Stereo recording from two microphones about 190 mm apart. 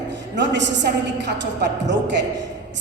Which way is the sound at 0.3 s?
70° right (ahead or behind).